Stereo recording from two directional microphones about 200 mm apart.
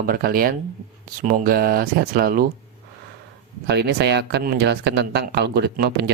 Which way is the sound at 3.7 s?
55° right (ahead or behind).